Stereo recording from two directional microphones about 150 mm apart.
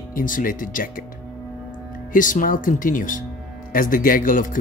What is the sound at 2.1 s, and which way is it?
Speech, 60° left (ahead or behind).